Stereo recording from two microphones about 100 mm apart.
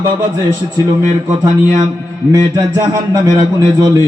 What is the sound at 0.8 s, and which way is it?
Music, 35° right (ahead or behind).